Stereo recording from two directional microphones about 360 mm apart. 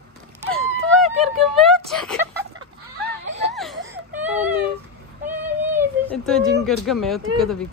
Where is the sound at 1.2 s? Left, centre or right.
Centre.